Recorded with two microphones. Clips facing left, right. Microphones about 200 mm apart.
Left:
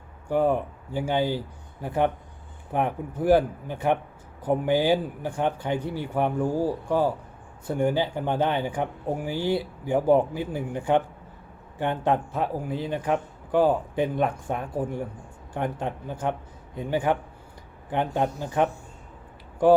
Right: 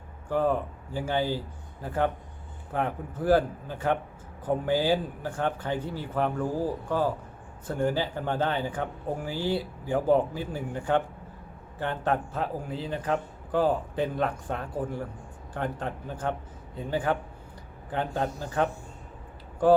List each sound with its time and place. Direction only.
0.3 s a man's voice: 15° left (ahead or behind)